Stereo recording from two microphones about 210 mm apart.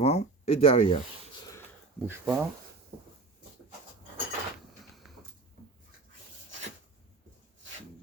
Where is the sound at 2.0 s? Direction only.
Centre (ahead or behind).